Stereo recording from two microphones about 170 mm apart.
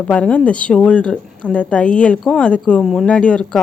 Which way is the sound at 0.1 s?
5° left (ahead or behind).